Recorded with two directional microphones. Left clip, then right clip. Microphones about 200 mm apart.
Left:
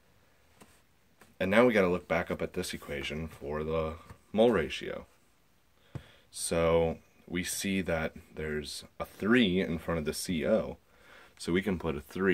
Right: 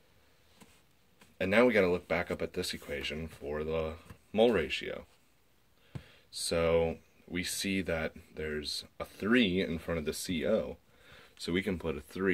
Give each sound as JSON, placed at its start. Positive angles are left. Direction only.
{"t": 1.4, "sound": "speech", "side_deg": 40}
{"t": 6.0, "sound": "speech", "side_deg": 40}